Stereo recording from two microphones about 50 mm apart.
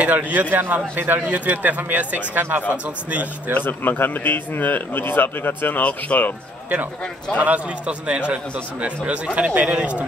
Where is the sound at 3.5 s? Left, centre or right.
Left.